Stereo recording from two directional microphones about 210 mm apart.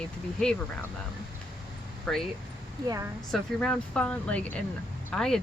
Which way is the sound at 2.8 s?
15° right (ahead or behind).